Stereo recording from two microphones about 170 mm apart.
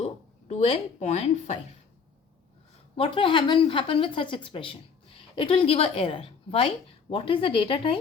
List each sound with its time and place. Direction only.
0.0 s a woman's voice: 40° left (ahead or behind)
2.9 s a woman's voice: 30° left (ahead or behind)